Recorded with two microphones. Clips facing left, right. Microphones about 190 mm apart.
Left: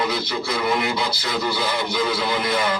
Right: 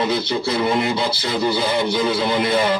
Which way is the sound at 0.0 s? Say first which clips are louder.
Right 4 dB; 25° right (ahead or behind).